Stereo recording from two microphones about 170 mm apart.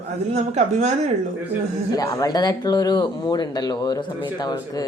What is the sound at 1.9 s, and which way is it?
Speech, 20° left (ahead or behind).